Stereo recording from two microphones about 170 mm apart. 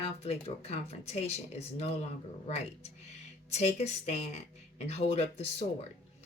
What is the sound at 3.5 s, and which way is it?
Speech, 40° left (ahead or behind).